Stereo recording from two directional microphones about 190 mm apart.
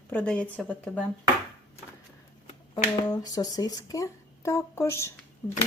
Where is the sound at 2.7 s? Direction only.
20° left (ahead or behind).